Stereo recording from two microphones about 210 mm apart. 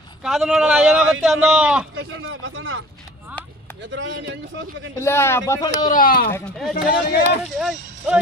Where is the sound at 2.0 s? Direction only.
70° right (ahead or behind).